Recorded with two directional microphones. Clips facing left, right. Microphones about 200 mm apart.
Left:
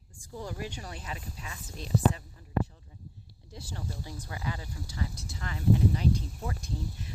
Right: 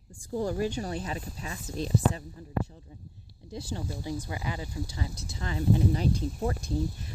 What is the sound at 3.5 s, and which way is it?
Speech, 20° right (ahead or behind).